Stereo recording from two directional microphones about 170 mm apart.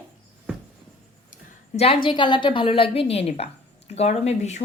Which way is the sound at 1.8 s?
30° left (ahead or behind).